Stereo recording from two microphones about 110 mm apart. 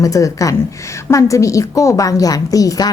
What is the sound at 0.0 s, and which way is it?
A woman's voice, 30° left (ahead or behind).